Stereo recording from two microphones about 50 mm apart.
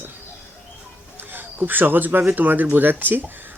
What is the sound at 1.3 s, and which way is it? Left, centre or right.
Speech, right.